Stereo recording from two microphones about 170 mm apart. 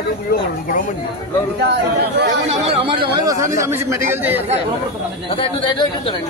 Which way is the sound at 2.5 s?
35° right (ahead or behind).